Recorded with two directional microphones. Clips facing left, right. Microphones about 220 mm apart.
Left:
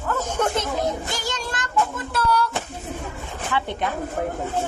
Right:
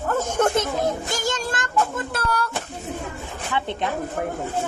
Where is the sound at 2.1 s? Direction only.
50° right (ahead or behind).